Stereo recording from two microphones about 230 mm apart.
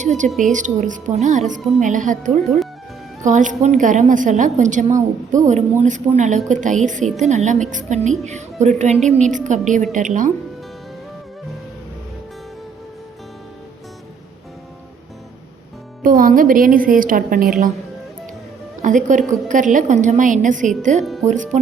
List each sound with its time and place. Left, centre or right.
0.0 s a woman's voice: right
0.3 s a woman's voice: centre
0.5 s a woman's voice: right
16.0 s a woman's voice: right
18.8 s a woman's voice: right